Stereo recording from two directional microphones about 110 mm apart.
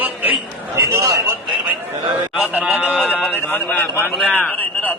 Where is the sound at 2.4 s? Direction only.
10° right (ahead or behind).